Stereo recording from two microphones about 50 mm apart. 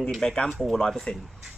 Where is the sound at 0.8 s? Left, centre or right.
Centre.